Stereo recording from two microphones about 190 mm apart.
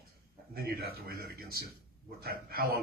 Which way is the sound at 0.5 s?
55° right (ahead or behind).